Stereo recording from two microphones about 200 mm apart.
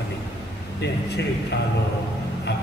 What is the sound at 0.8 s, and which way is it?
Speech, 60° left (ahead or behind).